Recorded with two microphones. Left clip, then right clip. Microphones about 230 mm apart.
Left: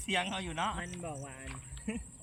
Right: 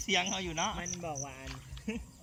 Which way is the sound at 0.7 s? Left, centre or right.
Centre.